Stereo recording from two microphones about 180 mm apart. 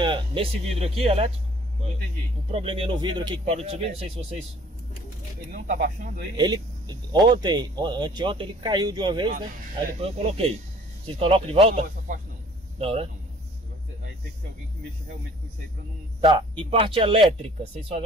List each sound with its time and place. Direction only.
0.0 s speech: 25° right (ahead or behind)
2.5 s speech: 30° right (ahead or behind)
5.5 s speech: 50° right (ahead or behind)
6.3 s speech: 25° right (ahead or behind)
16.2 s speech: 30° right (ahead or behind)